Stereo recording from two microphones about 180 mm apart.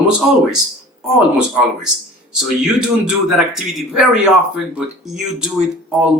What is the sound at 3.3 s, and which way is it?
Speech, centre (ahead or behind).